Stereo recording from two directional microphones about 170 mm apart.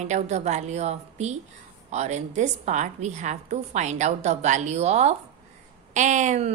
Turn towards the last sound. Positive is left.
turn(degrees=-45)  # may be behind; listen again after turning